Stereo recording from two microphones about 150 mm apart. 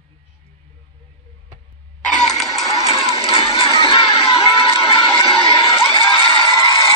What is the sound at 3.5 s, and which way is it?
Children shouting, 40° left (ahead or behind).